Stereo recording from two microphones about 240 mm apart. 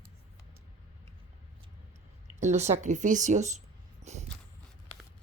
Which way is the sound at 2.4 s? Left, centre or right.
Right.